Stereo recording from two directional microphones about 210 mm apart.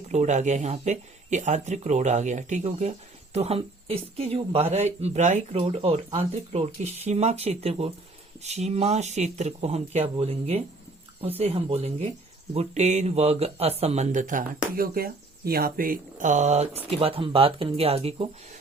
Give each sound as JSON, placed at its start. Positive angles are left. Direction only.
{"t": 0.1, "sound": "speech", "side_deg": -35}